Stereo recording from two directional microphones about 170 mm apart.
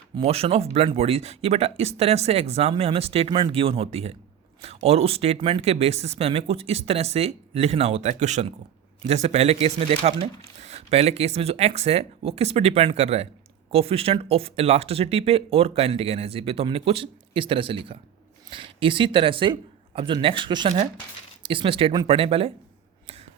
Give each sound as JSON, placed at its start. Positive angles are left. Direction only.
{"t": 0.2, "sound": "speech", "side_deg": -35}